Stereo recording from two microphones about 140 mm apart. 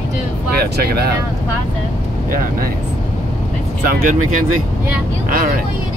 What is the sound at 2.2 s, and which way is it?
Speech, 80° right.